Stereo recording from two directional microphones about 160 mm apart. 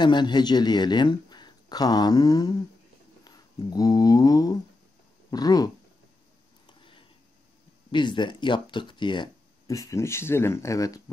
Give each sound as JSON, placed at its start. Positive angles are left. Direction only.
{"t": 0.0, "sound": "speech", "side_deg": 25}
{"t": 6.8, "sound": "a sound", "side_deg": 30}
{"t": 7.9, "sound": "speech", "side_deg": 30}